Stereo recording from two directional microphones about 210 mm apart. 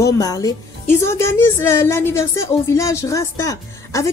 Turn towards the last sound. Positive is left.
turn(degrees=15)  # may be behind; listen again after turning